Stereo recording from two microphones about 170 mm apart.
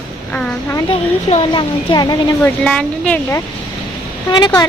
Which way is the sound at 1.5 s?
25° left (ahead or behind).